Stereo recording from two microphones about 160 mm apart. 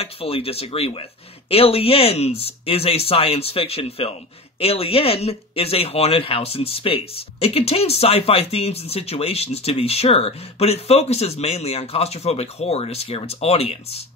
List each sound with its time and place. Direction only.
0.0 s speech: 35° left (ahead or behind)